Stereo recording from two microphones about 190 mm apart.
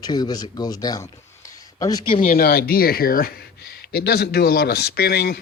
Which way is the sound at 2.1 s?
50° left (ahead or behind).